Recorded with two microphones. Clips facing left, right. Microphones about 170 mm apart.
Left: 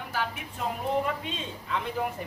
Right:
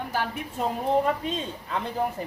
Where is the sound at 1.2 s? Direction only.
40° right (ahead or behind).